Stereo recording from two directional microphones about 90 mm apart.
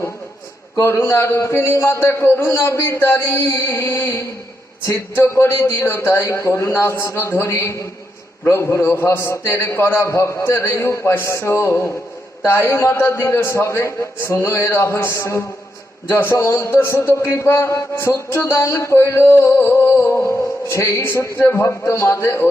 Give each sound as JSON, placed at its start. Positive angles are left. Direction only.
{"t": 0.8, "sound": "a man's voice", "side_deg": 30}